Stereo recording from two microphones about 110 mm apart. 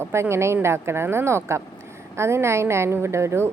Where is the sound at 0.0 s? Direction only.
25° right (ahead or behind).